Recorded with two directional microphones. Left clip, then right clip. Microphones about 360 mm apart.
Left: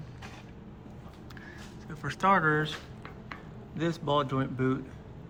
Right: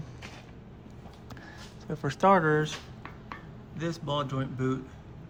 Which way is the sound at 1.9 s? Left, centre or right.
Centre.